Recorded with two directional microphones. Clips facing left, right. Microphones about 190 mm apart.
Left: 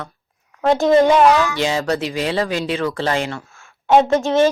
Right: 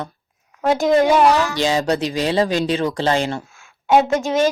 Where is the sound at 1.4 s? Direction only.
35° right (ahead or behind).